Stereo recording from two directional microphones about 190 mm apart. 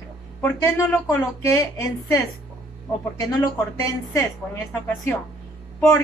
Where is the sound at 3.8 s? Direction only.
15° left (ahead or behind).